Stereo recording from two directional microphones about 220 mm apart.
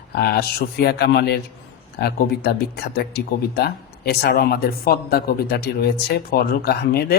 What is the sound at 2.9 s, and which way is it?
Speech, 45° left (ahead or behind).